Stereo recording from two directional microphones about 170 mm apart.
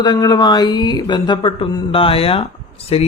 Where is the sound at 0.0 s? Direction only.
25° left (ahead or behind).